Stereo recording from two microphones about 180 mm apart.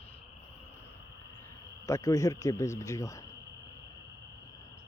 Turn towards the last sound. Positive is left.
turn(degrees=15)  # may be behind; listen again after turning